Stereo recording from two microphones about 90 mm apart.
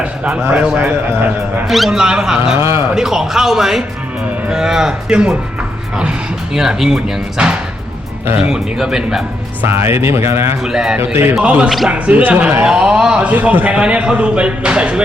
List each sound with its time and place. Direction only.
0.5 s a man's voice: 5° right (ahead or behind)
0.8 s speech: 20° right (ahead or behind)
1.6 s a man's voice: centre (ahead or behind)
2.6 s speech: 30° right (ahead or behind)
2.9 s a man's voice: 5° right (ahead or behind)
9.6 s speech: 25° right (ahead or behind)
10.6 s speech: 5° right (ahead or behind)
10.9 s speech: 20° right (ahead or behind)
11.3 s a man's voice: 10° right (ahead or behind)